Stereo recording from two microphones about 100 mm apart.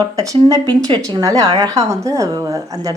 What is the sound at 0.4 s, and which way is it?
A woman's voice, 40° right (ahead or behind).